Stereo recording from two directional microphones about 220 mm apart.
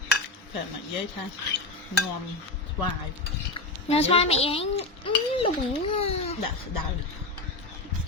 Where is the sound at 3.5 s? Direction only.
25° left (ahead or behind).